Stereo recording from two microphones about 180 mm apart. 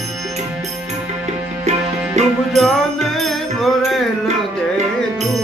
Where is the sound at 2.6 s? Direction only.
Centre (ahead or behind).